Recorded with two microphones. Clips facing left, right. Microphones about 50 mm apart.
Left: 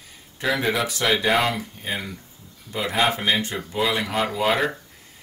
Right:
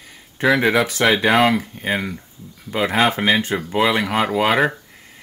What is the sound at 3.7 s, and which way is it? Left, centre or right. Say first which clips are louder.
Speech: right 5 dB; right.